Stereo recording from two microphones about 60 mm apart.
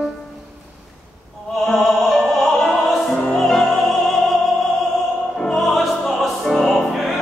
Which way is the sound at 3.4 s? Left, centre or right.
Centre.